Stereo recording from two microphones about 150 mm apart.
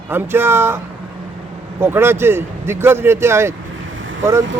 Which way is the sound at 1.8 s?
15° right (ahead or behind).